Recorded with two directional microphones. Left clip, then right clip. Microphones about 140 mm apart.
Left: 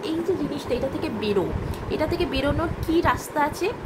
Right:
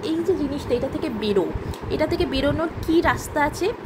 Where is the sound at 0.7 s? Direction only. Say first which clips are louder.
Right 2 dB; 25° right (ahead or behind).